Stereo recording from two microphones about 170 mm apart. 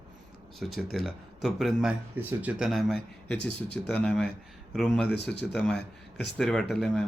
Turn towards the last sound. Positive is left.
turn(degrees=5)  # may be behind; listen again after turning